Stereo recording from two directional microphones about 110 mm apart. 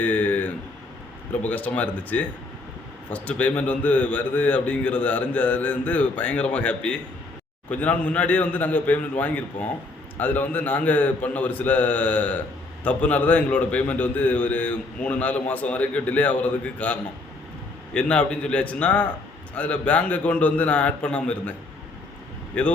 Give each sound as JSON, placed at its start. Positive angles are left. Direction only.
{"t": 0.0, "sound": "a sound", "side_deg": 15}
{"t": 1.5, "sound": "a man's voice", "side_deg": 15}
{"t": 22.5, "sound": "a man's voice", "side_deg": 15}